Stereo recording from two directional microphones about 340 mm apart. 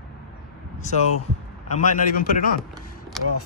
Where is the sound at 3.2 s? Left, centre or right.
Centre.